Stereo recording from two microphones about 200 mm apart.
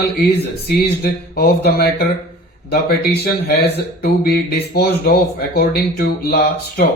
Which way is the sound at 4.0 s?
50° left (ahead or behind).